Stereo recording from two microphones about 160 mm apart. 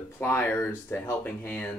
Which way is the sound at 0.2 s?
15° left (ahead or behind).